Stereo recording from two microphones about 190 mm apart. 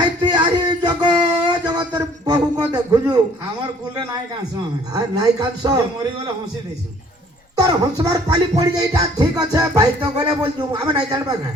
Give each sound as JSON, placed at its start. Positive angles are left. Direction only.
{"t": 0.2, "sound": "a sound", "side_deg": -25}
{"t": 3.6, "sound": "music", "side_deg": -20}
{"t": 7.7, "sound": "music", "side_deg": -20}